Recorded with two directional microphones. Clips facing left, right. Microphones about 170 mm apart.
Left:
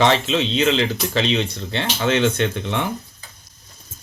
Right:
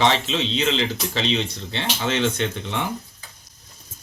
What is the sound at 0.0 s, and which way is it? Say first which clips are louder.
Speech: left 3 dB; 55° left (ahead or behind).